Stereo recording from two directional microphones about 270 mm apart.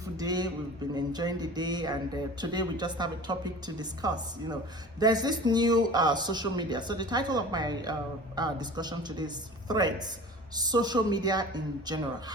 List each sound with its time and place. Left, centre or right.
0.2 s speech: centre